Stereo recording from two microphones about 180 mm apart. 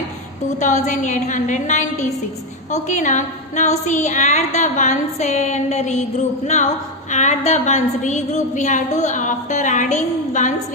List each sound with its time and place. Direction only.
0.6 s a woman's voice: 40° left (ahead or behind)